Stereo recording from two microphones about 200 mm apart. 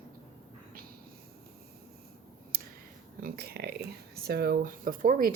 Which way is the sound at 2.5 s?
45° right (ahead or behind).